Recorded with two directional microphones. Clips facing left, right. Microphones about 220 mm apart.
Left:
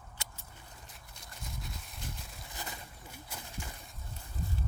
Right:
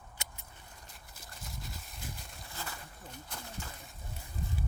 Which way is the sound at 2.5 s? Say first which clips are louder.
Even; 15° left (ahead or behind).